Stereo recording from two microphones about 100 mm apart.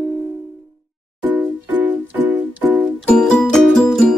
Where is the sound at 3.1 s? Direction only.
5° left (ahead or behind).